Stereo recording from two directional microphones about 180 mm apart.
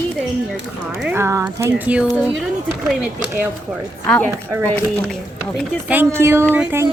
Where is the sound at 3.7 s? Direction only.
5° left (ahead or behind).